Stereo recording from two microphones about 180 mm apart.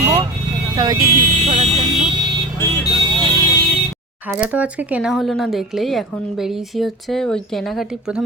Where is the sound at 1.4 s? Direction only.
35° right (ahead or behind).